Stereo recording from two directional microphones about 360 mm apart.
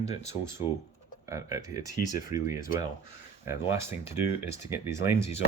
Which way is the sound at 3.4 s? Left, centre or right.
Centre.